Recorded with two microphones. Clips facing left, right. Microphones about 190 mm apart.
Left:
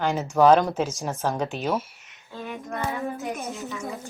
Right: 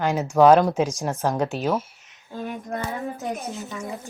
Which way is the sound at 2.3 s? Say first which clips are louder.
Right 3 dB; 40° right (ahead or behind).